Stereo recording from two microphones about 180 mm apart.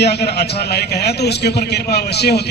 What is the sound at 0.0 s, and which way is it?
A man's voice, 65° left (ahead or behind).